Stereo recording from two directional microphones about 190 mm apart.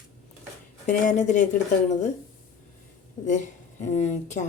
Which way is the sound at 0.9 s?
40° left (ahead or behind).